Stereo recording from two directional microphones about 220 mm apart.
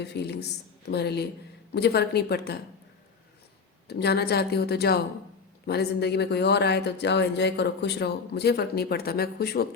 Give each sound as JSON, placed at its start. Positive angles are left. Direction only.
{"t": 0.0, "sound": "speech", "side_deg": 50}
{"t": 3.8, "sound": "speech", "side_deg": 50}